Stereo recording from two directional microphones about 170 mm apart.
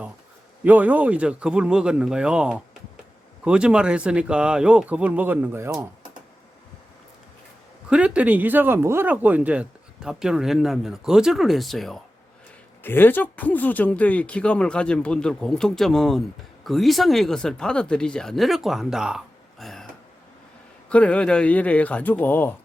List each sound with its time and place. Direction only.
0.6 s speech: 10° right (ahead or behind)
7.9 s speech: 5° right (ahead or behind)
12.8 s speech: 10° left (ahead or behind)
20.9 s speech: 5° left (ahead or behind)